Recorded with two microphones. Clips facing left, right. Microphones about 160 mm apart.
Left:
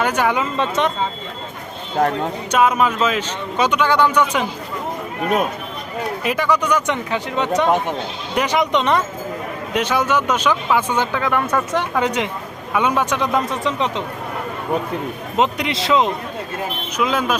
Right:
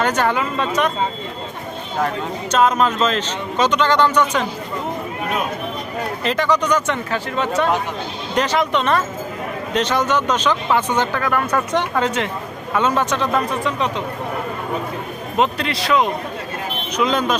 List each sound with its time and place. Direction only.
0.0 s speech: 10° left (ahead or behind)
0.5 s a man's voice: 25° left (ahead or behind)
2.5 s speech: 10° left (ahead or behind)
6.2 s speech: 10° left (ahead or behind)
15.4 s a man's voice: 20° left (ahead or behind)
17.0 s speech: 5° left (ahead or behind)